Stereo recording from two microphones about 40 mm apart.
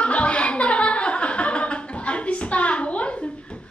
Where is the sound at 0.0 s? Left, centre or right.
Left.